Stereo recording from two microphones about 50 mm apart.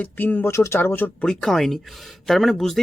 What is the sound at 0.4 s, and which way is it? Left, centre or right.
Speech, left.